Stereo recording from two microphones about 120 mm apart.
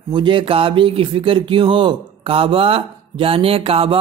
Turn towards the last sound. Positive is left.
turn(degrees=-55)  # may be behind; listen again after turning